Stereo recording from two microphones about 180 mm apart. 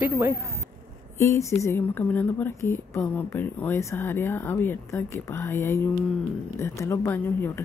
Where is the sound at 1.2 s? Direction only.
15° left (ahead or behind).